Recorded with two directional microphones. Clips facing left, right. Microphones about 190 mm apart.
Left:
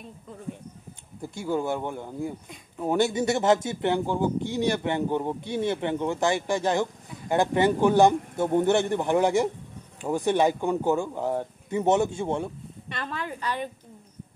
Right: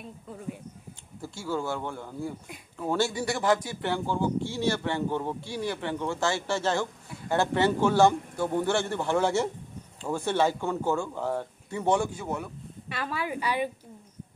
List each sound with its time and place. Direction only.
1.2 s speech: 20° left (ahead or behind)
12.9 s speech: 10° right (ahead or behind)